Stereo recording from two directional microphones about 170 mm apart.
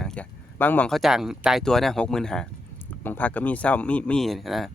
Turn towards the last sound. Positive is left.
turn(degrees=0)  # may be behind; listen again after turning